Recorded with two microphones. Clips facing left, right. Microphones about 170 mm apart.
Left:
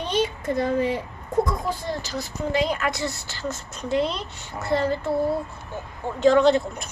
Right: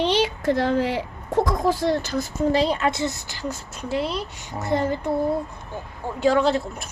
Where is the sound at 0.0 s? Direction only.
80° right.